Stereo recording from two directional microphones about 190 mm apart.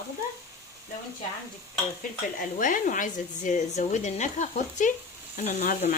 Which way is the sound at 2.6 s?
45° left (ahead or behind).